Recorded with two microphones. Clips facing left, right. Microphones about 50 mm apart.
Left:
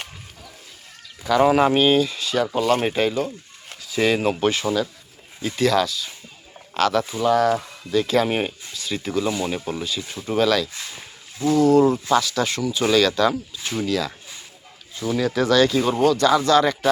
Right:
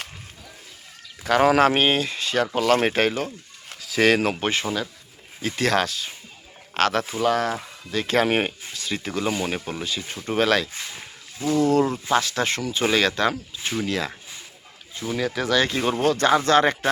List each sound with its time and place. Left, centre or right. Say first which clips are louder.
1.2 s speech: left 1 dB; right
1.5 s speech: right 1 dB; right
1.7 s speech: left 4 dB; right
2.6 s speech: right 1 dB; right
3.8 s speech: right 1 dB; right
4.4 s speech: left 4 dB; right
5.4 s speech: left 2 dB; right
11.7 s speech: left 4 dB; right
14.9 s speech: left 4 dB; centre
15.5 s speech: left 3 dB; right